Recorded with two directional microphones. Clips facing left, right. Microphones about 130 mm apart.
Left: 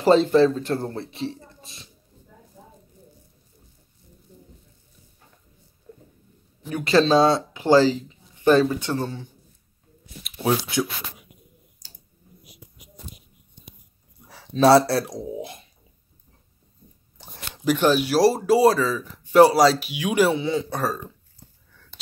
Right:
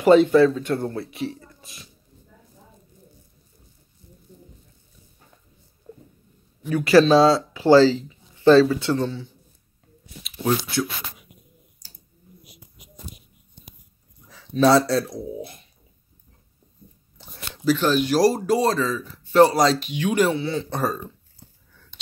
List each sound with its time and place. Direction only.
0.0 s speech: 30° left (ahead or behind)
5.9 s a sound: 30° right (ahead or behind)
6.6 s speech: 25° left (ahead or behind)
10.3 s speech: 10° left (ahead or behind)
14.5 s speech: 35° left (ahead or behind)
15.0 s speech: 90° left
17.6 s speech: 10° left (ahead or behind)
20.7 s speech: centre (ahead or behind)